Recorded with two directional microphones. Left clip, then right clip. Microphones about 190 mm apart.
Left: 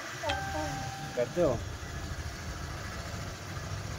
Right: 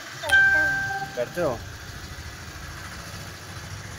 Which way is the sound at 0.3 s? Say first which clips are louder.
Right 18 dB; 55° right (ahead or behind).